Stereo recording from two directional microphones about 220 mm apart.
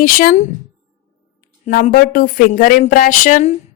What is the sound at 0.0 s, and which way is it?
A woman's voice, 40° left (ahead or behind).